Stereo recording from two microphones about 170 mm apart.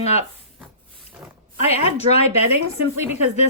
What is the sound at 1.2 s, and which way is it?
Speech, 5° right (ahead or behind).